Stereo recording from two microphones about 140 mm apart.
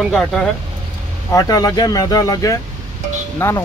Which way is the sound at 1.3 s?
25° left (ahead or behind).